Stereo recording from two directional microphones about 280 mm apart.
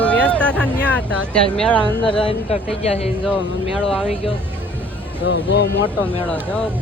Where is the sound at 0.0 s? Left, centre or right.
Centre.